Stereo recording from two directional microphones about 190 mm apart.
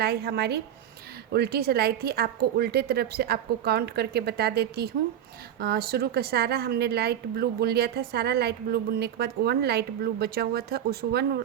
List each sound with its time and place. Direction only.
0.0 s a woman's voice: 55° right (ahead or behind)